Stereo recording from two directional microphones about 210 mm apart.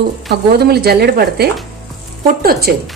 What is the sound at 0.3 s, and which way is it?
A woman's voice, 50° right (ahead or behind).